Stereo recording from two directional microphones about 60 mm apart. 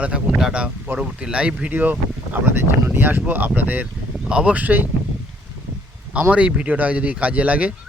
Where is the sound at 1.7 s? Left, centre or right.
Right.